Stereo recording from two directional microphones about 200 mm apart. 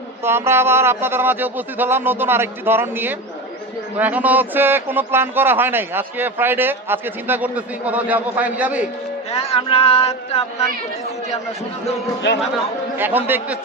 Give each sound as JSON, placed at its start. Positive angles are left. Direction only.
{"t": 0.2, "sound": "a man's voice", "side_deg": -10}
{"t": 9.3, "sound": "speech", "side_deg": 30}
{"t": 13.0, "sound": "a man's voice", "side_deg": -10}